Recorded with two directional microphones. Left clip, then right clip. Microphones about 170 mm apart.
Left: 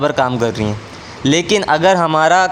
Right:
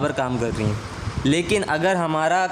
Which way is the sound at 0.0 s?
20° left (ahead or behind).